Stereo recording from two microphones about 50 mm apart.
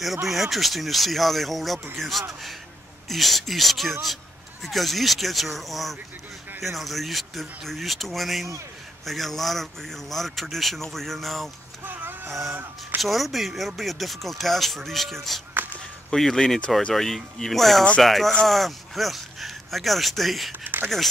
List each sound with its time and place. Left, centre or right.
0.0 s speech: centre
11.8 s a sound: right
13.0 s speech: centre
20.6 s speech: right